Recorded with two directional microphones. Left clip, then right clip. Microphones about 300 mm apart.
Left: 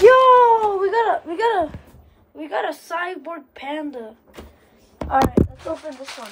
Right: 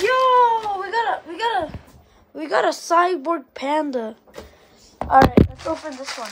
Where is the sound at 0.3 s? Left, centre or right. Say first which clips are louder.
Left 3 dB; centre.